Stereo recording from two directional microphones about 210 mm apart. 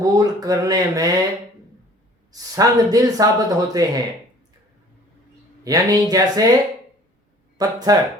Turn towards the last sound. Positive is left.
turn(degrees=-15)  # may be behind; listen again after turning